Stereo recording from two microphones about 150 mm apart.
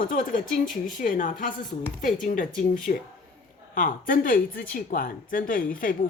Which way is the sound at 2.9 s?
70° left (ahead or behind).